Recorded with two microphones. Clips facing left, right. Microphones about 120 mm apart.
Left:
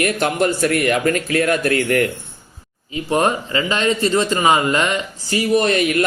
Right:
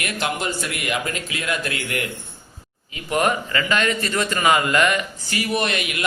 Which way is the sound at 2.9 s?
30° left (ahead or behind).